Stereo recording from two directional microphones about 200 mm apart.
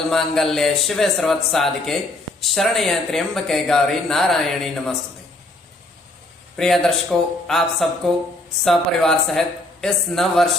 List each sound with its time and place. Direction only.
0.1 s speech: centre (ahead or behind)
6.6 s speech: centre (ahead or behind)